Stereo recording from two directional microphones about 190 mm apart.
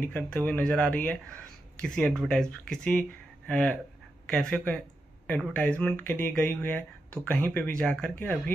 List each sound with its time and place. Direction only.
0.0 s speech: 5° left (ahead or behind)